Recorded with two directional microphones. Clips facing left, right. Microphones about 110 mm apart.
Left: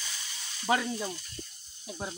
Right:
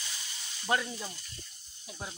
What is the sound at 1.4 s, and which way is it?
Snake, 20° left (ahead or behind).